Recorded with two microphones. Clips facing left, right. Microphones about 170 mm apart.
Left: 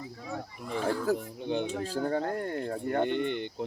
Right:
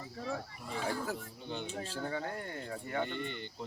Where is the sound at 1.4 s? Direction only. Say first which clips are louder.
Left 9 dB; 60° left (ahead or behind).